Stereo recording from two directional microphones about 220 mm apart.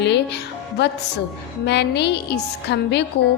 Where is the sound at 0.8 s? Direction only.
50° left (ahead or behind).